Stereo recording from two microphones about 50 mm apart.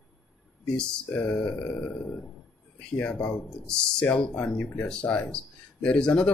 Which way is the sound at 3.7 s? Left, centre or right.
Centre.